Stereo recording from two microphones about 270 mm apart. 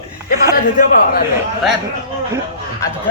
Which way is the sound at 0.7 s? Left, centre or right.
Left.